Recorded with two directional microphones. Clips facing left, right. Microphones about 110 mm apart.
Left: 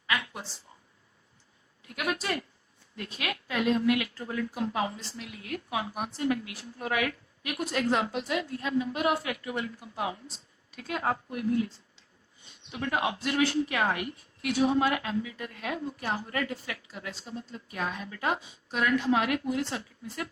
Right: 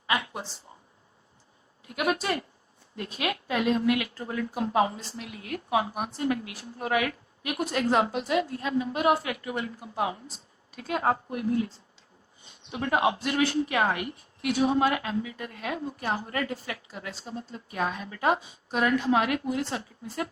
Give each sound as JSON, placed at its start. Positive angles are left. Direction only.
{"t": 0.1, "sound": "a sound", "side_deg": -25}
{"t": 1.9, "sound": "a woman's voice", "side_deg": -25}
{"t": 5.9, "sound": "a woman's voice", "side_deg": -45}
{"t": 12.7, "sound": "a woman's voice", "side_deg": -30}